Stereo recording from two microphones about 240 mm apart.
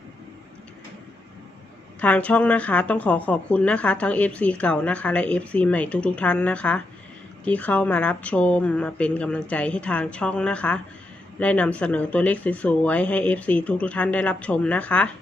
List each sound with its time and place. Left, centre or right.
2.0 s a woman's voice: centre